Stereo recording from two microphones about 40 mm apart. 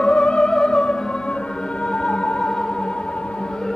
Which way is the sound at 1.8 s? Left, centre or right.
Left.